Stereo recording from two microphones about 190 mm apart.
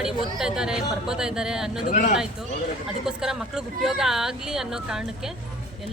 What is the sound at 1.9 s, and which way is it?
Speech, 45° left (ahead or behind).